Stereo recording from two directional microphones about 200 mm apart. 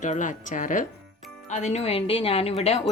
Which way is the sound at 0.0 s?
40° left (ahead or behind).